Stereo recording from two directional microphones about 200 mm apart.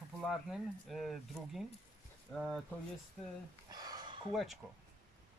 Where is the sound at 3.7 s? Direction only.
20° right (ahead or behind).